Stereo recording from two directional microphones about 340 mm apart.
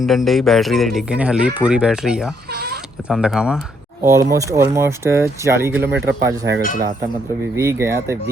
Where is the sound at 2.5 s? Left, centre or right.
Right.